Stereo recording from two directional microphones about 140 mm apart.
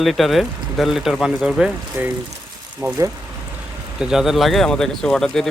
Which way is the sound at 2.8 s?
20° right (ahead or behind).